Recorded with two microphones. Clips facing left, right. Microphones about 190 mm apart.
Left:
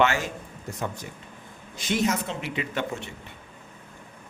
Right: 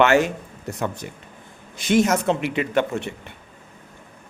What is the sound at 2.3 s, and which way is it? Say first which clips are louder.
Speech: right 9 dB; 65° right (ahead or behind).